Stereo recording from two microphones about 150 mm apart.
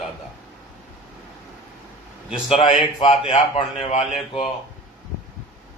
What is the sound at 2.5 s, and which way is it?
A man's voice, 40° left (ahead or behind).